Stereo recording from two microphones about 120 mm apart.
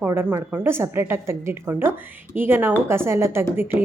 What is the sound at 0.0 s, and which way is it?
A woman's voice, 15° right (ahead or behind).